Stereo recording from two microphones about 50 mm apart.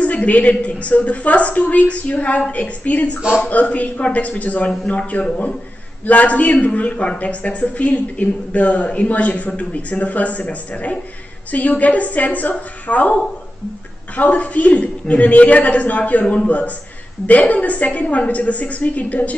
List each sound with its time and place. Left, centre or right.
0.0 s a man's voice: left
3.2 s a man's voice: centre
3.4 s a man's voice: left